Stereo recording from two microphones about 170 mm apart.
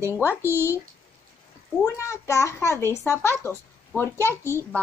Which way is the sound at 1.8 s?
15° left (ahead or behind).